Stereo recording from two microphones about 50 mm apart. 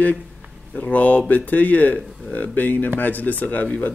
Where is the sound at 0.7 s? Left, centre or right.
Left.